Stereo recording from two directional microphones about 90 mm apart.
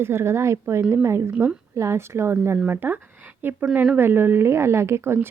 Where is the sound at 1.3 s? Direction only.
15° right (ahead or behind).